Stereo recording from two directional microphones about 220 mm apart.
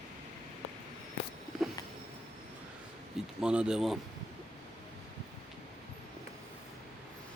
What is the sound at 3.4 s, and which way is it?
Speech, 5° right (ahead or behind).